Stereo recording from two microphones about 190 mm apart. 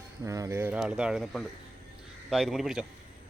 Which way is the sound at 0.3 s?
15° right (ahead or behind).